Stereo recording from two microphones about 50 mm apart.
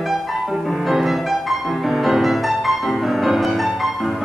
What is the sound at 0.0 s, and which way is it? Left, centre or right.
Music, centre.